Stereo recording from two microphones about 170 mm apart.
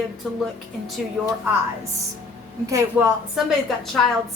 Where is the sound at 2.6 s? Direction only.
20° right (ahead or behind).